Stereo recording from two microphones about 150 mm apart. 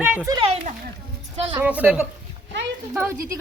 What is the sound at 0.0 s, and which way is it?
Speech, 10° right (ahead or behind).